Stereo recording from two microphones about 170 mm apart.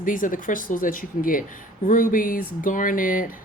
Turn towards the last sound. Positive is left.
turn(degrees=55)  # may be behind; listen again after turning